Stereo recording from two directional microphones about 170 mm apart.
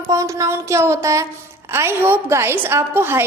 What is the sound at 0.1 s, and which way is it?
A woman's voice, 20° right (ahead or behind).